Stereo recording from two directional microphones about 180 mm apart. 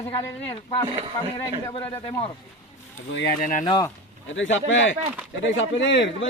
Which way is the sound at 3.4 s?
50° left (ahead or behind).